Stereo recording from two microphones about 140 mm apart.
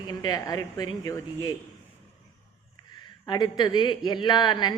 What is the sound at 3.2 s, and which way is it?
Speech, 30° left (ahead or behind).